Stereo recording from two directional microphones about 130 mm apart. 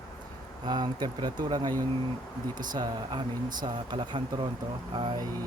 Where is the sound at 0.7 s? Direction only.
35° right (ahead or behind).